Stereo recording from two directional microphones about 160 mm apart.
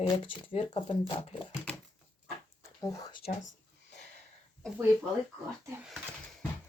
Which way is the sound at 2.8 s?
25° left (ahead or behind).